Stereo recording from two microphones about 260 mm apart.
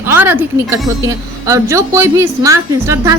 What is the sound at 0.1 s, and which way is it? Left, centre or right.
A woman's voice, centre.